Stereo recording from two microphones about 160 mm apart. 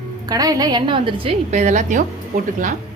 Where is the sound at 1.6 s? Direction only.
50° right (ahead or behind).